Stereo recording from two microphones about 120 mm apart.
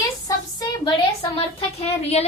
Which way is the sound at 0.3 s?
35° left (ahead or behind).